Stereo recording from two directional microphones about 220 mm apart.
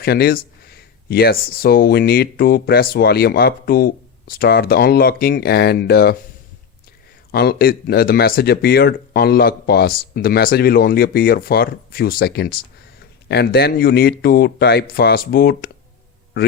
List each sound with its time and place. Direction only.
0.0 s speech: 45° left (ahead or behind)
7.3 s speech: 45° left (ahead or behind)